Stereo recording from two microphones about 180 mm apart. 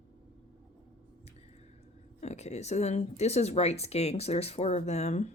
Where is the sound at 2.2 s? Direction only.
40° left (ahead or behind).